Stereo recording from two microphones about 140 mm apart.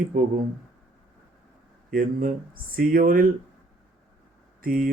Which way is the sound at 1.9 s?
85° right.